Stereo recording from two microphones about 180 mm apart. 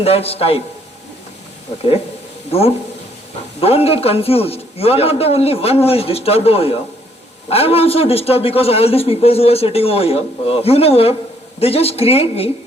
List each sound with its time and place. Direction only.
0.0 s a man's voice: 35° left (ahead or behind)
2.5 s a man's voice: 35° left (ahead or behind)